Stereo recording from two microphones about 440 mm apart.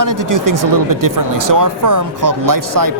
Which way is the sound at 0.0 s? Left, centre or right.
Right.